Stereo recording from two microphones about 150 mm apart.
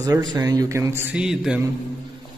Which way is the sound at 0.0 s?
25° right (ahead or behind).